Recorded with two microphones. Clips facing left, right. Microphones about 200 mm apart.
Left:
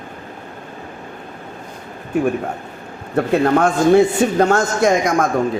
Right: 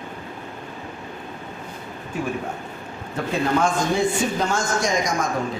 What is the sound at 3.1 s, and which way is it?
A man's voice, 60° left (ahead or behind).